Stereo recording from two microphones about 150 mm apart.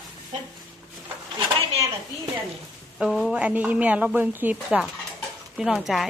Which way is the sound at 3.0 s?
Centre (ahead or behind).